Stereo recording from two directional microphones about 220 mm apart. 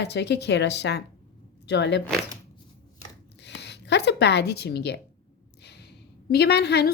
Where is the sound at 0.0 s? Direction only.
50° left (ahead or behind).